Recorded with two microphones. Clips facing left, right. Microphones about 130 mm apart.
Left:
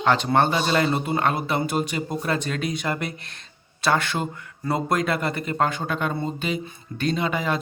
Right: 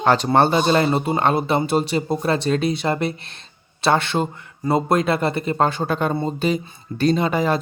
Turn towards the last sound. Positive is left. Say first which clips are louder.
# right 6 dB
turn(degrees=-35)  # may be behind; listen again after turning